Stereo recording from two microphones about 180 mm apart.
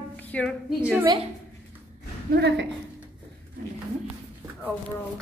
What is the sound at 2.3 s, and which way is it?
Speech, 65° right (ahead or behind).